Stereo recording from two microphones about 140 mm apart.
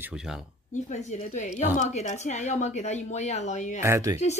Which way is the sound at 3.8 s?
20° right (ahead or behind).